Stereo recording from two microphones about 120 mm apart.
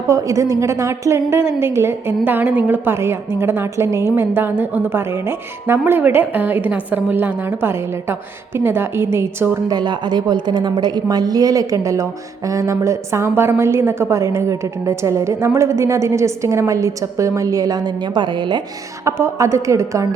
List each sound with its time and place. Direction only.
0.1 s a woman's voice: 25° right (ahead or behind)
9.6 s a woman's voice: 35° right (ahead or behind)
19.0 s a woman's voice: 25° right (ahead or behind)